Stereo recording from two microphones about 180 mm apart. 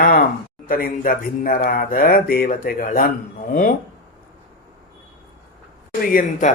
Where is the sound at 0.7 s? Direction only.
50° left (ahead or behind).